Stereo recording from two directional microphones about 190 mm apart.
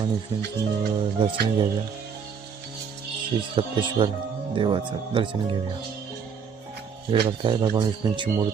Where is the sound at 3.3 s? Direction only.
25° right (ahead or behind).